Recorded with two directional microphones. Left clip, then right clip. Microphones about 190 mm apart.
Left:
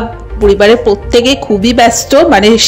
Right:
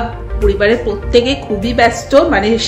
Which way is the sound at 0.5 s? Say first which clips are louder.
Left 7 dB; 35° left (ahead or behind).